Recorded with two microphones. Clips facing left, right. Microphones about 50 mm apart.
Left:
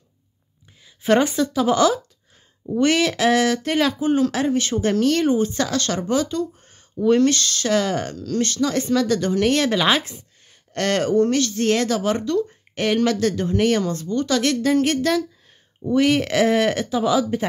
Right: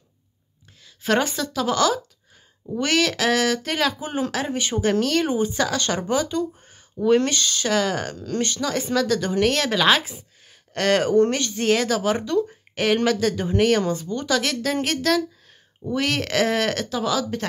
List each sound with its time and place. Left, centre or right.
0.8 s speech: centre
4.6 s speech: centre
8.1 s speech: centre
8.5 s speech: centre
11.2 s speech: centre
11.6 s speech: centre
12.2 s speech: centre
12.7 s speech: centre
14.3 s speech: centre